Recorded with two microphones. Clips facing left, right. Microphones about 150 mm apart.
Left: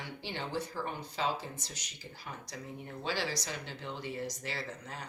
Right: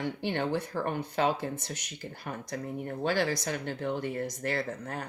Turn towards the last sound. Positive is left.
turn(degrees=-55)  # may be behind; listen again after turning